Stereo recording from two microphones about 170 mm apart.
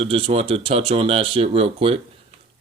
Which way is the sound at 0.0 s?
35° right (ahead or behind).